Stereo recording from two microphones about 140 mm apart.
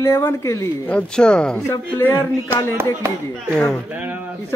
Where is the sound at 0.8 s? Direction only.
5° left (ahead or behind).